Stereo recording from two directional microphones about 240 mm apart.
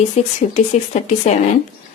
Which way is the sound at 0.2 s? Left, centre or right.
Left.